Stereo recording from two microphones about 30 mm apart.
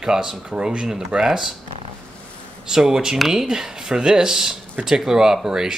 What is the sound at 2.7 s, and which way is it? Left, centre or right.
Speech, centre.